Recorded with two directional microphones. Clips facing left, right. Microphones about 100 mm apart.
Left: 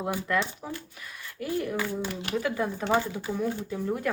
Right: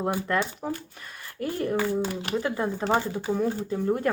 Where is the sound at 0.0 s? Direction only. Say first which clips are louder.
Right 2 dB; 40° right (ahead or behind).